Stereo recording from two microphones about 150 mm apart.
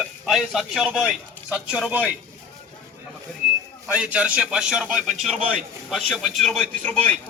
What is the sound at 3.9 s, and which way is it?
A man's voice, 10° right (ahead or behind).